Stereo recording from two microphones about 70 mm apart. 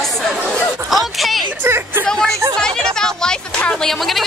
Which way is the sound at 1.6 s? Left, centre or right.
Right.